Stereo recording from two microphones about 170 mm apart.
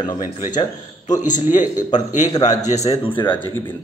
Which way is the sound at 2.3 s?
25° left (ahead or behind).